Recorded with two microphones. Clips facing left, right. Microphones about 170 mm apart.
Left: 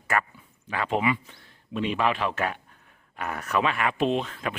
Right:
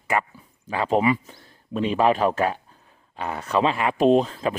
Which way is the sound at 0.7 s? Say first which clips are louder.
Right 5 dB; 35° right (ahead or behind).